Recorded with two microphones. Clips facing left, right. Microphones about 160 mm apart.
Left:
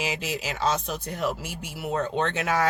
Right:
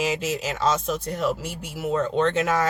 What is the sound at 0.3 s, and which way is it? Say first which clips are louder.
Speech: right 3 dB; 45° right (ahead or behind).